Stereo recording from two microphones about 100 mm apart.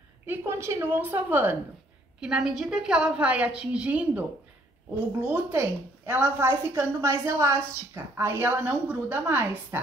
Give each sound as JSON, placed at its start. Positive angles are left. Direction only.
{"t": 0.3, "sound": "a woman's voice", "side_deg": -25}
{"t": 2.1, "sound": "a woman's voice", "side_deg": -10}